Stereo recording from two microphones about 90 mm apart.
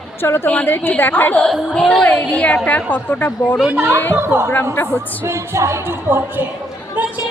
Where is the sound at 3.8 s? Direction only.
35° right (ahead or behind).